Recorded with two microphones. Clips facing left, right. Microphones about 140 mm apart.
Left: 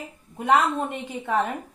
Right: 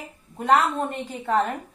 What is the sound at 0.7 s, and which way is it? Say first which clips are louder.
Speech: even; 5° left (ahead or behind).